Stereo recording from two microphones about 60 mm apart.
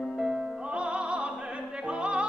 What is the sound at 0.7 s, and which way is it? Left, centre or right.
Music, centre.